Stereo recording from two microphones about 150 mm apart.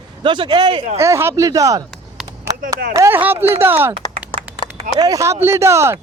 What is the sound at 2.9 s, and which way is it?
Speech, 15° right (ahead or behind).